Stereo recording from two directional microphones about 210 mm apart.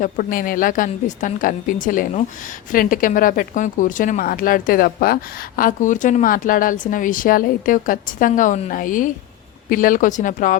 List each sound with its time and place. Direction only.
0.0 s speech: 40° left (ahead or behind)